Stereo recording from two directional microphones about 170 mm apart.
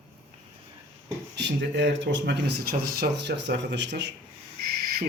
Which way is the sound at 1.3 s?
90° right.